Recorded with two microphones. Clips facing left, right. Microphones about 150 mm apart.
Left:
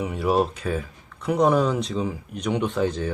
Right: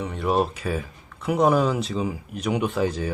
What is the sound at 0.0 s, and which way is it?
Speech, 5° left (ahead or behind).